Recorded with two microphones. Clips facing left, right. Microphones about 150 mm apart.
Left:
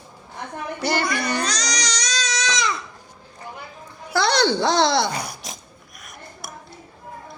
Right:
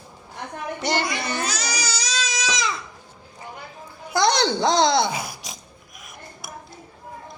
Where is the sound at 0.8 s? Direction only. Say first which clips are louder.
Left 2 dB; 20° right (ahead or behind).